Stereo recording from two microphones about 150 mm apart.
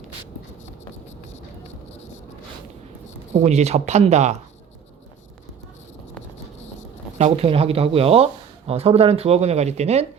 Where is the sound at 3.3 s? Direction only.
45° right (ahead or behind).